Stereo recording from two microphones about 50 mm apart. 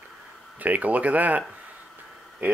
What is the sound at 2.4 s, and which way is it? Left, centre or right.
Speech, right.